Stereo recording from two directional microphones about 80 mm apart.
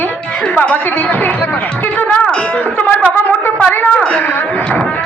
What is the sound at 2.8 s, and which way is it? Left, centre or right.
Speech, left.